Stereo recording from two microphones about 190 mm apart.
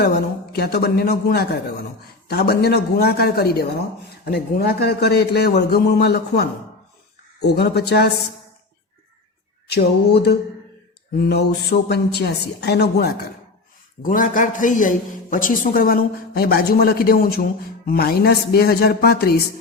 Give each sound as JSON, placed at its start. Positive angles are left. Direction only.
{"t": 0.5, "sound": "a man's voice", "side_deg": 55}
{"t": 9.7, "sound": "a man's voice", "side_deg": 60}
{"t": 14.0, "sound": "a man's voice", "side_deg": 45}